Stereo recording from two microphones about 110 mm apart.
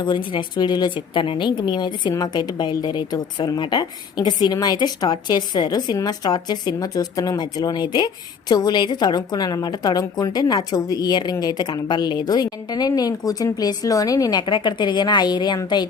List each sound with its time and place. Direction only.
0.0 s a woman's voice: 45° left (ahead or behind)